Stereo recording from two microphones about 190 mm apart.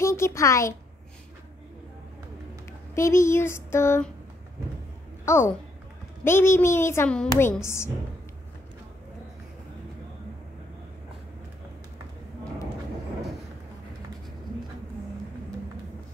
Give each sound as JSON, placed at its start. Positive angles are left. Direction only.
{"t": 0.0, "sound": "a child's voice", "side_deg": 15}
{"t": 2.9, "sound": "a child's voice", "side_deg": 15}
{"t": 5.2, "sound": "a child's voice", "side_deg": 15}